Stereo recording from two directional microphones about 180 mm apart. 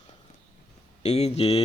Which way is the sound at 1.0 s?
35° left (ahead or behind).